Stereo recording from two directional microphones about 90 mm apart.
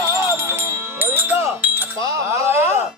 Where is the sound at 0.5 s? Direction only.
30° right (ahead or behind).